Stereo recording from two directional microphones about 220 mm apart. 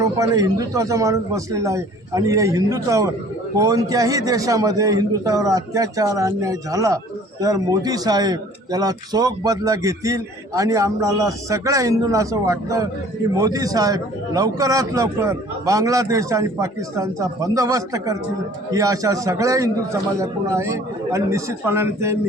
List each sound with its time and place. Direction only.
0.0 s a man's voice: 15° right (ahead or behind)